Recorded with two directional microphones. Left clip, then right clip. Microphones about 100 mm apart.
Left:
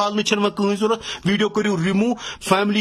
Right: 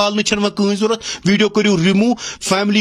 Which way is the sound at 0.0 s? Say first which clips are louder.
Right 3 dB; 25° right (ahead or behind).